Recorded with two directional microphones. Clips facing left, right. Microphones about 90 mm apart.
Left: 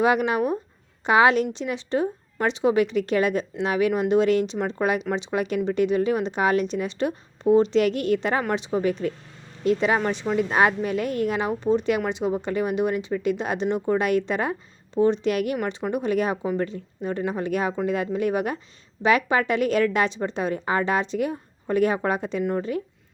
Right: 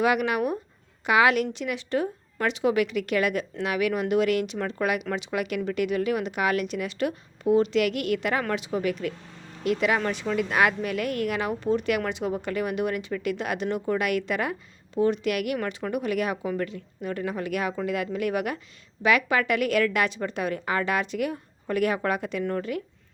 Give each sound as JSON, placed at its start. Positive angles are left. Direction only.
{"t": 0.0, "sound": "a woman's voice", "side_deg": 25}
{"t": 15.5, "sound": "a woman's voice", "side_deg": 20}